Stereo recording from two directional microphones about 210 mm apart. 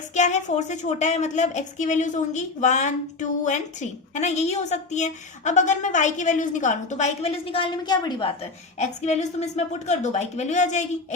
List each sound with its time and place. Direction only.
0.1 s a woman's voice: 35° left (ahead or behind)
8.8 s a woman's voice: 35° left (ahead or behind)